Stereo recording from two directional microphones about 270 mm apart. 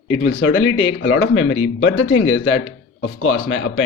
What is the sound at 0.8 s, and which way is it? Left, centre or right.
Speech, left.